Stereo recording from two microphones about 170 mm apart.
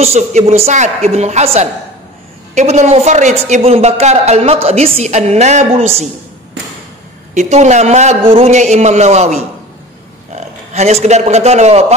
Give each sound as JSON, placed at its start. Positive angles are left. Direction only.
{"t": 0.0, "sound": "a woman's voice", "side_deg": -40}
{"t": 7.3, "sound": "a woman's voice", "side_deg": -40}